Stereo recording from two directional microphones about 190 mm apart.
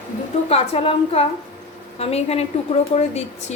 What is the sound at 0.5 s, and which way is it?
A woman's voice, 30° left (ahead or behind).